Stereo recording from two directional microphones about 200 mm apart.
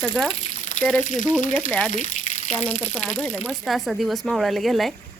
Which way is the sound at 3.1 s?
5° left (ahead or behind).